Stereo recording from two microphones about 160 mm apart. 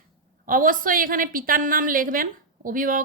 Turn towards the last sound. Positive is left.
turn(degrees=-60)  # may be behind; listen again after turning